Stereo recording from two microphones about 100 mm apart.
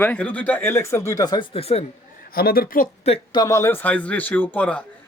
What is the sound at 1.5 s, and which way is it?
Speech, 85° left.